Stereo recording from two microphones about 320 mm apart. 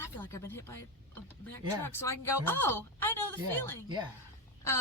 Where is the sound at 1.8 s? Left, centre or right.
Centre.